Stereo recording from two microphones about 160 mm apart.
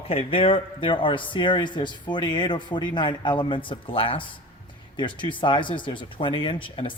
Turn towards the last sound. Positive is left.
turn(degrees=30)  # may be behind; listen again after turning